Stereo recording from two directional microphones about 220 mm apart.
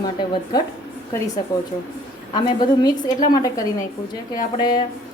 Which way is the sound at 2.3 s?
20° left (ahead or behind).